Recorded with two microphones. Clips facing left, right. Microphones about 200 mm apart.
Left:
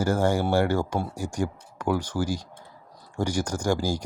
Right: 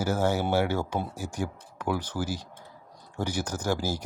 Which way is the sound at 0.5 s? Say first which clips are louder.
Left 3 dB; 10° right (ahead or behind).